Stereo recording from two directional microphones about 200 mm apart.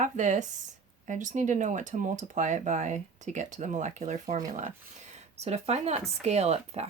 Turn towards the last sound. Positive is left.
turn(degrees=-30)  # may be behind; listen again after turning